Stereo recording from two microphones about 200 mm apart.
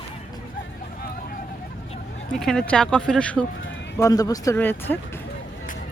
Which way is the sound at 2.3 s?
5° left (ahead or behind).